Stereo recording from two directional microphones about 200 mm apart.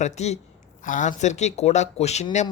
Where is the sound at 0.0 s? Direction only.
35° left (ahead or behind).